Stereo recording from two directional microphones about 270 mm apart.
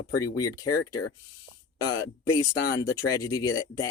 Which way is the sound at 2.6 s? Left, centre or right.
Left.